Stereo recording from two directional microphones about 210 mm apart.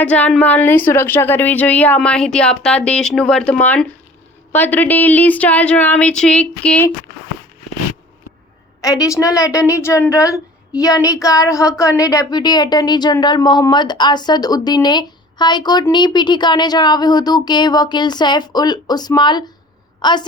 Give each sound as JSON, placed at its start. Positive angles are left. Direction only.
{"t": 0.0, "sound": "a woman's voice", "side_deg": 5}
{"t": 8.8, "sound": "a woman's voice", "side_deg": 15}